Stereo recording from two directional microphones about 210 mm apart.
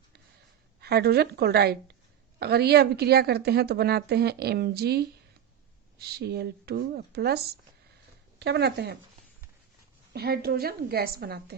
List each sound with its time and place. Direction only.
0.8 s a woman's voice: 50° right (ahead or behind)
10.1 s a woman's voice: 50° right (ahead or behind)